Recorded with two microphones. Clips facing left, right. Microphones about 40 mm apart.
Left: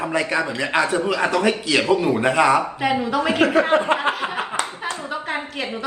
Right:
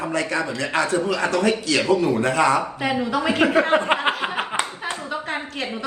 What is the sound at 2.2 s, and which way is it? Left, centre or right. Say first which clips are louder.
Speech: left 2 dB; centre.